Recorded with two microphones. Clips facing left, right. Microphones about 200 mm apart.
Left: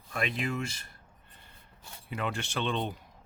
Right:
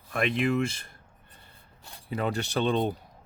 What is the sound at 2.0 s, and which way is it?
Speech, 35° right (ahead or behind).